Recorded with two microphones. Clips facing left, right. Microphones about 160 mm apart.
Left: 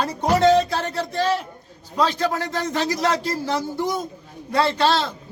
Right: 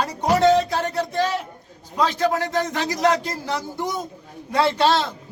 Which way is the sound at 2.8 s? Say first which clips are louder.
Even; 15° right (ahead or behind).